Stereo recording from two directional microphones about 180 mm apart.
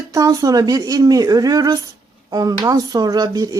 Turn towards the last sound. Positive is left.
turn(degrees=-20)  # may be behind; listen again after turning